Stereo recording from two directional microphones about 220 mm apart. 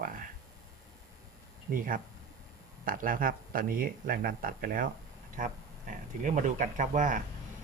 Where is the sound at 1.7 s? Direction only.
40° right (ahead or behind).